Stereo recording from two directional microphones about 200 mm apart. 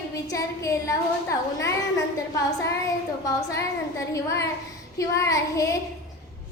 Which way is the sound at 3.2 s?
15° left (ahead or behind).